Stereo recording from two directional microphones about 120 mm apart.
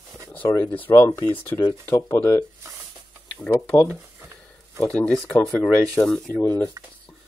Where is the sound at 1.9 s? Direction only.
30° left (ahead or behind).